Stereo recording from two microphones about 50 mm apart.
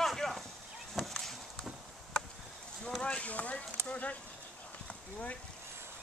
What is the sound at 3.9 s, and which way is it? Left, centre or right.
Speech, left.